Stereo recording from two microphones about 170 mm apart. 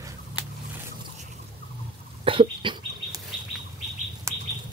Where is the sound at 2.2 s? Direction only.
30° right (ahead or behind).